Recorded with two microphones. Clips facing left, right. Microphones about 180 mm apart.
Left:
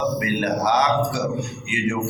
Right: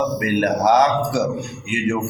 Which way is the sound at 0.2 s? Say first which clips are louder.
Right 4 dB; 50° right (ahead or behind).